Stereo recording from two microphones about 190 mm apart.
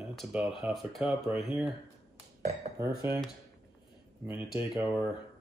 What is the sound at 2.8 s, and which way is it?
Speech, 15° right (ahead or behind).